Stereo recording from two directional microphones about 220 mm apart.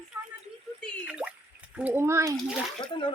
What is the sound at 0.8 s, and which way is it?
Drip, 5° right (ahead or behind).